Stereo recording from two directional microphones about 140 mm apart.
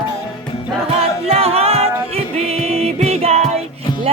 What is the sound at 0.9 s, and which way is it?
Music, 45° right (ahead or behind).